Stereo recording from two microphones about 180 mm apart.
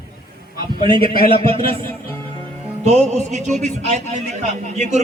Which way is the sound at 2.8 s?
35° right (ahead or behind).